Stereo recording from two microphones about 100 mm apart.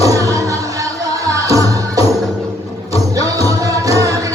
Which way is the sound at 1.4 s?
35° right (ahead or behind).